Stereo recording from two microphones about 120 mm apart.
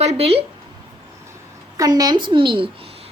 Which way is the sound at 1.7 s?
30° right (ahead or behind).